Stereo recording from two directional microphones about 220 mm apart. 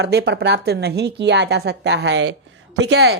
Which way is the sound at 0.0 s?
50° right (ahead or behind).